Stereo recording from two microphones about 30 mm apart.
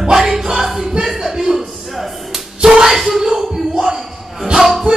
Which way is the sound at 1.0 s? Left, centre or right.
Centre.